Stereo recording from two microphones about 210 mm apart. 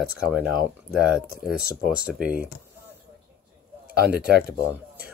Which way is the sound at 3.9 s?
50° right (ahead or behind).